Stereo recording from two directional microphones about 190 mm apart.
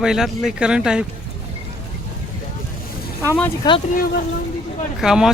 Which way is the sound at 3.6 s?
20° left (ahead or behind).